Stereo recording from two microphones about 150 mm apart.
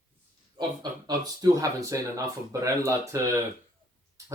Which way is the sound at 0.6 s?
25° right (ahead or behind).